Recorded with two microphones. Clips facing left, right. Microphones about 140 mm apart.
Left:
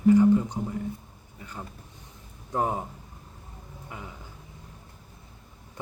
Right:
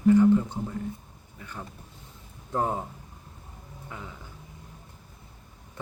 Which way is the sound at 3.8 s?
15° left (ahead or behind).